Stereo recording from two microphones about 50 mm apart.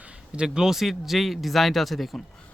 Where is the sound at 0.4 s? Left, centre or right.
Centre.